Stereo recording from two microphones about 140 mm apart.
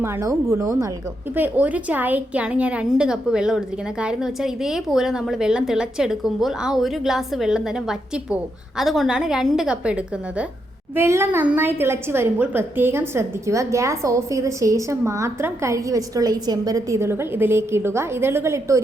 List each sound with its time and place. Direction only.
0.0 s a woman's voice: 20° right (ahead or behind)
1.4 s a woman's voice: 10° right (ahead or behind)